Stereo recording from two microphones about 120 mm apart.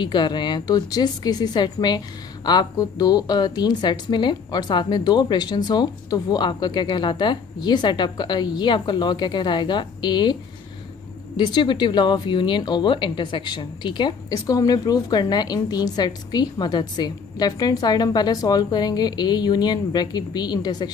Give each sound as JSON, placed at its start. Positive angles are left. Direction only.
{"t": 0.0, "sound": "a woman's voice", "side_deg": 40}
{"t": 11.3, "sound": "a woman's voice", "side_deg": 40}